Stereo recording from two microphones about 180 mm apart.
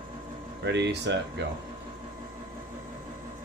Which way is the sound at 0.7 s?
75° right (ahead or behind).